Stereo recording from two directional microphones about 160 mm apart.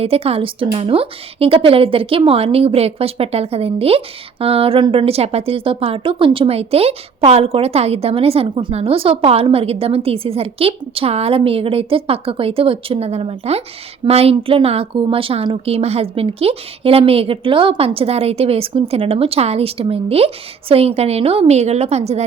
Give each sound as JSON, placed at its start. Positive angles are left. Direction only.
{"t": 0.0, "sound": "a woman's voice", "side_deg": -40}